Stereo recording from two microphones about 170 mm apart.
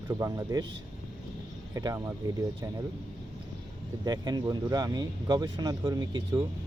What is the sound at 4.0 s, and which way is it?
Speech, 25° right (ahead or behind).